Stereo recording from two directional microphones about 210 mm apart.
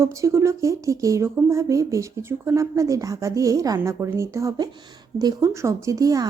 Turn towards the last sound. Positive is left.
turn(degrees=-15)  # may be behind; listen again after turning